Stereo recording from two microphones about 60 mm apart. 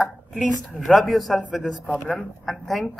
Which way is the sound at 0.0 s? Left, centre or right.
Centre.